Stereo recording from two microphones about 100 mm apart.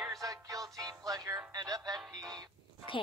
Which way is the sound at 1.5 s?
40° right (ahead or behind).